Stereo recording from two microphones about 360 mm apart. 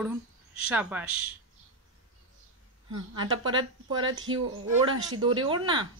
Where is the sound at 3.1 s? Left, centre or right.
Centre.